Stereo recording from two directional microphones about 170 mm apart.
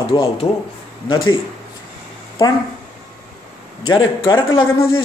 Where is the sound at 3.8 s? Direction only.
25° left (ahead or behind).